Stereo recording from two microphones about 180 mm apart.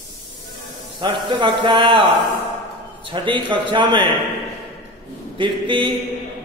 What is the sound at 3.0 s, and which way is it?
A man's voice, 25° right (ahead or behind).